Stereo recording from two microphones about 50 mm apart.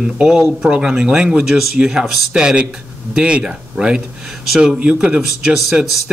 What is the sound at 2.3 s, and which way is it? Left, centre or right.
Speech, centre.